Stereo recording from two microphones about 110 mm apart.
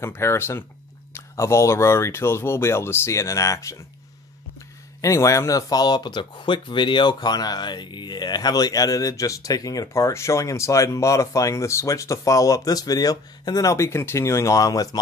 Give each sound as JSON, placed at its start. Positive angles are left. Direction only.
{"t": 0.0, "sound": "speech", "side_deg": 25}
{"t": 5.0, "sound": "speech", "side_deg": 30}